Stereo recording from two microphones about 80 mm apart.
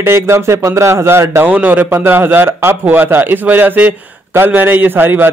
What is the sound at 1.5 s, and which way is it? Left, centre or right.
A man's voice, right.